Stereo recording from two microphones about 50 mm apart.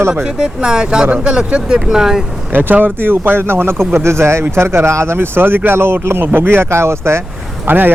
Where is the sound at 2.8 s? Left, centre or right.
Right.